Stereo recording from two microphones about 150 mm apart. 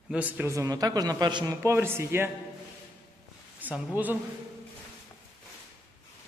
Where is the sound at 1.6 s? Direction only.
15° right (ahead or behind).